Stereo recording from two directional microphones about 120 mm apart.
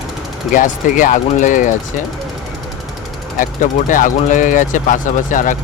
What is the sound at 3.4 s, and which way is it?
Speech, 90° left.